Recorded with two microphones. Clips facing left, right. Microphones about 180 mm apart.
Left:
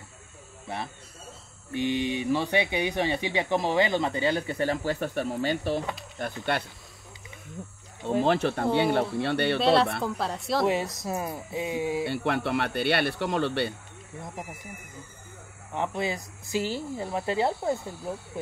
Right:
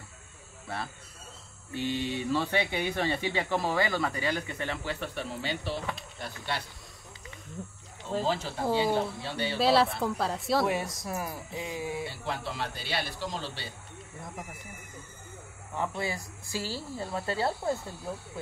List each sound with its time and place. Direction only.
1.7 s speech: 15° left (ahead or behind); by 6.6 s 55° left (ahead or behind)
8.1 s speech: 65° left (ahead or behind)
9.6 s a woman's voice: centre (ahead or behind)
10.7 s a woman's voice: 25° left (ahead or behind)
12.1 s speech: 65° left (ahead or behind)
15.7 s a woman's voice: 20° left (ahead or behind)